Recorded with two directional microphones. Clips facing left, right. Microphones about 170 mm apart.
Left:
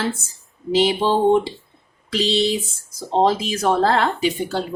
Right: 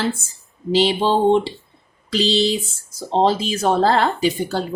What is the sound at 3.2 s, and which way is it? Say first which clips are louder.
Speech: even; 30° right (ahead or behind).